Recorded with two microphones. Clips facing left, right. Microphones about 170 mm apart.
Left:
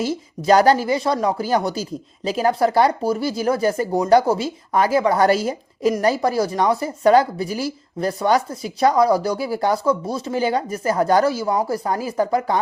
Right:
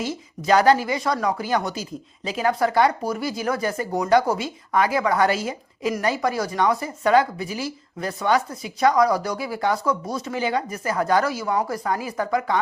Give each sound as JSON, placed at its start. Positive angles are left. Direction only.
{"t": 0.0, "sound": "speech", "side_deg": 35}